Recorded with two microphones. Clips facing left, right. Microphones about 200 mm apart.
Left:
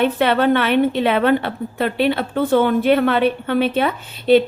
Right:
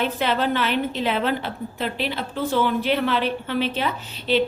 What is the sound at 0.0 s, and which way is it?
A woman's voice, 60° left (ahead or behind).